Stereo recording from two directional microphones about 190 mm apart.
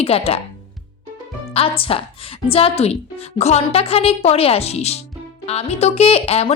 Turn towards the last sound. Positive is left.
turn(degrees=30)  # may be behind; listen again after turning